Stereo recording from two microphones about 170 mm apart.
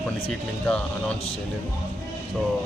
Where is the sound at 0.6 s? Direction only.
5° left (ahead or behind).